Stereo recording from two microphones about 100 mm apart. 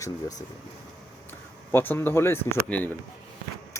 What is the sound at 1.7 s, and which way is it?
Speech, 20° left (ahead or behind).